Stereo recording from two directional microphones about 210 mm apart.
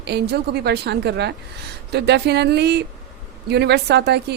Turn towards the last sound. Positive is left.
turn(degrees=-55)  # may be behind; listen again after turning